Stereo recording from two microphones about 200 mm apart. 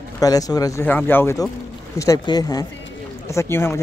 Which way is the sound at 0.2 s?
20° left (ahead or behind).